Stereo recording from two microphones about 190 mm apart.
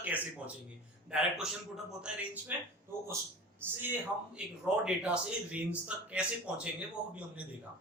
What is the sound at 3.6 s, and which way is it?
A man's voice, 10° right (ahead or behind).